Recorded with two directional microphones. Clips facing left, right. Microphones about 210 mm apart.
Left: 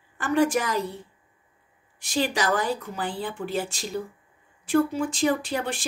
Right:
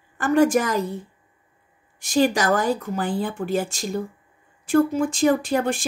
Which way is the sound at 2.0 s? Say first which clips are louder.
Right 6 dB; 45° right (ahead or behind).